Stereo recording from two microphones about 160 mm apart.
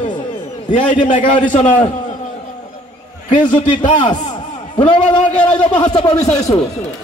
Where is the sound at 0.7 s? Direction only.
50° left (ahead or behind).